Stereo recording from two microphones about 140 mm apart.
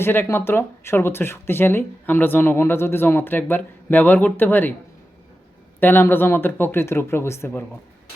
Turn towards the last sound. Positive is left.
turn(degrees=15)  # may be behind; listen again after turning